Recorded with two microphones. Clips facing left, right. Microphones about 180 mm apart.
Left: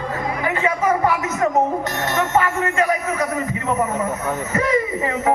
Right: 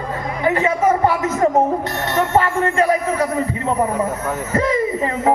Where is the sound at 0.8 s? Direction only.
30° right (ahead or behind).